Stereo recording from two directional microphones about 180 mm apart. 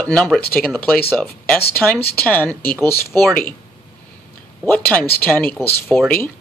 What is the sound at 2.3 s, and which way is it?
Speech, 10° left (ahead or behind).